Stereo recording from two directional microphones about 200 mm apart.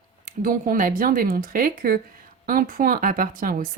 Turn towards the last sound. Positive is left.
turn(degrees=-45)  # may be behind; listen again after turning